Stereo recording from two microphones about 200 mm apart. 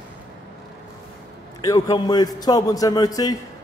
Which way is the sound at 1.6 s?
20° left (ahead or behind).